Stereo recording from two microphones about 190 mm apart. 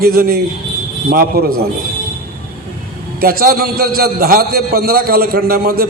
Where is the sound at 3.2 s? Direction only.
50° right (ahead or behind).